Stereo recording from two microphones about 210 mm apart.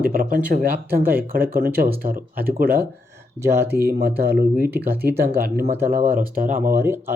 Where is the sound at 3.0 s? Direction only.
15° right (ahead or behind).